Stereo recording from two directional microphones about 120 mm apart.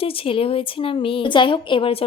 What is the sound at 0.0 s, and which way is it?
A woman's voice, 50° left (ahead or behind).